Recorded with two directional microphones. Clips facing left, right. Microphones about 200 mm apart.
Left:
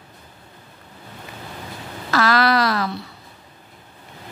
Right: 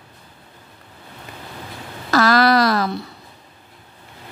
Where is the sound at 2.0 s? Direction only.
40° right (ahead or behind).